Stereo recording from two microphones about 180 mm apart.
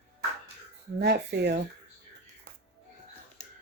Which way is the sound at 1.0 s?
65° right (ahead or behind).